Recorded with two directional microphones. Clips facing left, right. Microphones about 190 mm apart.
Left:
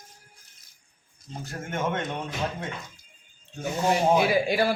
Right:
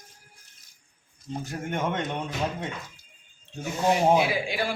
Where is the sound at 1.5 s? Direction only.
15° right (ahead or behind).